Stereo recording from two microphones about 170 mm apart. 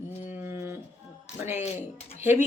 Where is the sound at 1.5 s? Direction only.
40° left (ahead or behind).